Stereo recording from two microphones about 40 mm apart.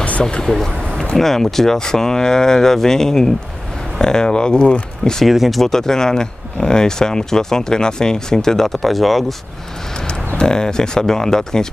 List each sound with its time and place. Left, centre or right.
0.5 s speech: centre; by 4.7 s left
5.2 s speech: centre
5.6 s speech: centre
10.0 s speech: centre